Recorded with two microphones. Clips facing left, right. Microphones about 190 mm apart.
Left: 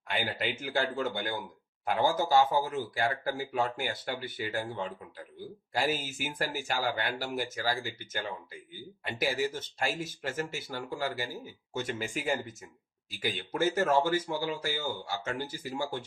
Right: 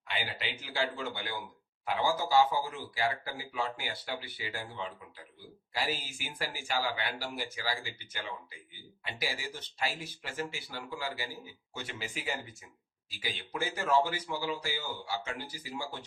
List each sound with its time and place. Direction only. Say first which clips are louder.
0.1 s speech: left 5 dB; 50° left (ahead or behind)